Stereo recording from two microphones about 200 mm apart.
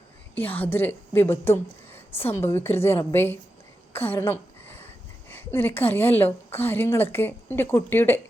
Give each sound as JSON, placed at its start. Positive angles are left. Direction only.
{"t": 0.3, "sound": "a woman's voice", "side_deg": 10}
{"t": 3.9, "sound": "a sound", "side_deg": 10}
{"t": 5.3, "sound": "a woman's voice", "side_deg": 10}